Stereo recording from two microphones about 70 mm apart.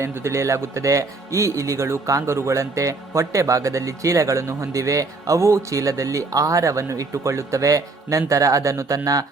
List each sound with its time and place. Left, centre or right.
0.0 s speech: right